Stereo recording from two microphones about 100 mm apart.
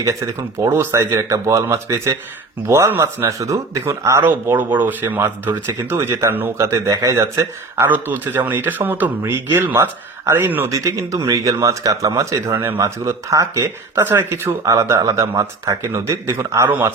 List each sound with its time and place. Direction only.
0.0 s speech: 30° right (ahead or behind)
10.7 s speech: 35° right (ahead or behind)
14.0 s speech: 20° right (ahead or behind)
14.6 s speech: 35° right (ahead or behind)